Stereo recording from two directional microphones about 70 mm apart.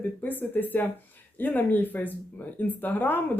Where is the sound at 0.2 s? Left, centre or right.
Left.